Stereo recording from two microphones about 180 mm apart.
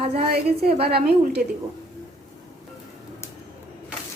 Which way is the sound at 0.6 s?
60° right (ahead or behind).